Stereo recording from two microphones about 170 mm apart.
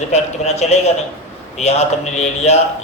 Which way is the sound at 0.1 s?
40° left (ahead or behind).